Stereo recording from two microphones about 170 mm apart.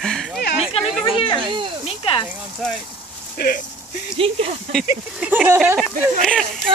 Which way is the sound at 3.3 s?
60° left (ahead or behind).